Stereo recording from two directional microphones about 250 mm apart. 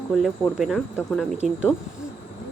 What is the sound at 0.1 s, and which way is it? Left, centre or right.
A woman's voice, centre.